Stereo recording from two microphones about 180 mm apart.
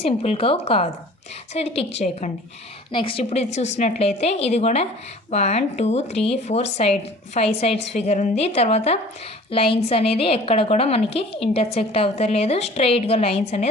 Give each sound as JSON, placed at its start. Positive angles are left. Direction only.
{"t": 0.0, "sound": "speech", "side_deg": 35}
{"t": 2.9, "sound": "speech", "side_deg": 30}